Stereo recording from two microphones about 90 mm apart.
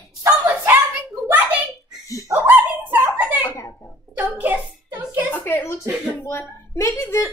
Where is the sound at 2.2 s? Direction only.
30° right (ahead or behind).